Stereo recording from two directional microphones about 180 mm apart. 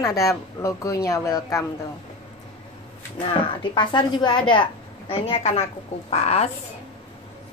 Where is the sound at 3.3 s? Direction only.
25° left (ahead or behind).